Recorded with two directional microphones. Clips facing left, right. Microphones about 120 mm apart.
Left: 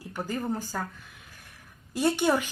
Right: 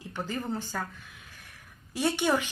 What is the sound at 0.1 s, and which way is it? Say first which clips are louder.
Speech: left 2 dB; 10° left (ahead or behind).